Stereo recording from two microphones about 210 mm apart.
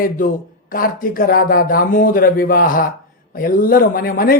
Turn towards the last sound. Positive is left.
turn(degrees=45)  # may be behind; listen again after turning